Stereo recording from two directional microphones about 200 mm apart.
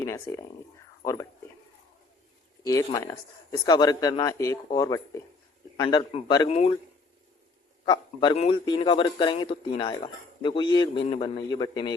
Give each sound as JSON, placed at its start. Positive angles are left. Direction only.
{"t": 0.0, "sound": "speech", "side_deg": 15}
{"t": 2.6, "sound": "speech", "side_deg": 15}
{"t": 7.9, "sound": "speech", "side_deg": 20}